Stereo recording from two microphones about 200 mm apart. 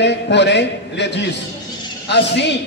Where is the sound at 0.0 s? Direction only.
60° left (ahead or behind).